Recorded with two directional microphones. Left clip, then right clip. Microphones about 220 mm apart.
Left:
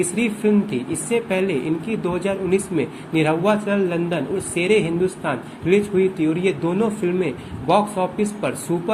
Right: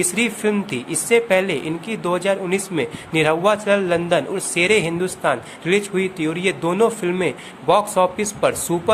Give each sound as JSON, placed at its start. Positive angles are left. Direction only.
{"t": 0.2, "sound": "speech", "side_deg": -30}